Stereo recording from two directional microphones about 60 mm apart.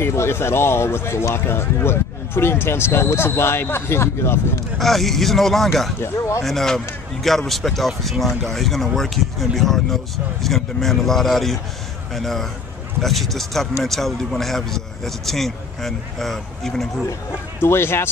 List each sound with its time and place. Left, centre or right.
0.0 s speech: left
4.7 s speech: centre
5.9 s speech: left
6.4 s speech: centre
17.6 s speech: left